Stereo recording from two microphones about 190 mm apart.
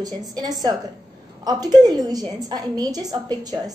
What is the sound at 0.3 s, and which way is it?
A woman's voice, 20° right (ahead or behind).